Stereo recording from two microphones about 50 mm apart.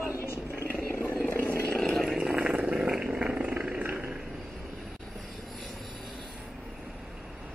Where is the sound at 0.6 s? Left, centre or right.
Left.